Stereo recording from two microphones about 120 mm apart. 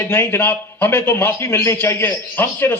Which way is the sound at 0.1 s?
20° left (ahead or behind).